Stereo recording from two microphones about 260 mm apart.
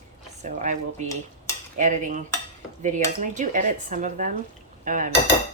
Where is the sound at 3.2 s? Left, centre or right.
Right.